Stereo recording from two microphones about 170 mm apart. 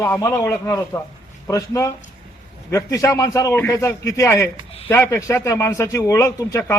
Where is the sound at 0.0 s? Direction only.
15° left (ahead or behind).